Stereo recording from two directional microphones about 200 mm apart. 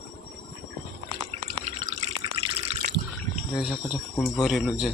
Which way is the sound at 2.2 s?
30° right (ahead or behind).